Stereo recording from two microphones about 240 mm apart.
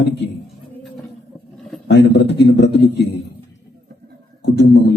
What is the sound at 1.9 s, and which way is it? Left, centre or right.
A man's voice, left.